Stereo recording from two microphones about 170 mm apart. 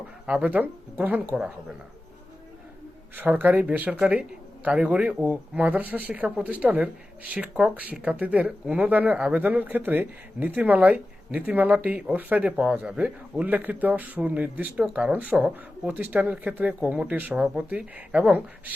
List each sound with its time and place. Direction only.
0.3 s speech: 10° right (ahead or behind)
3.2 s speech: 10° right (ahead or behind)